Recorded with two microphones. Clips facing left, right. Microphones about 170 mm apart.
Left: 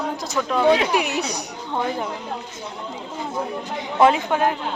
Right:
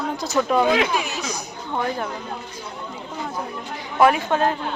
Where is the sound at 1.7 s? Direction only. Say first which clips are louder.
Even; 15° left (ahead or behind).